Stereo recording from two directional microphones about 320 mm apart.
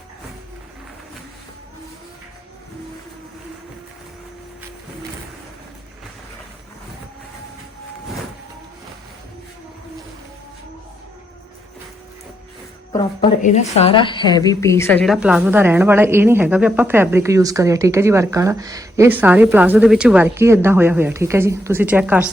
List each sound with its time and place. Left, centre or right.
12.9 s a woman's voice: centre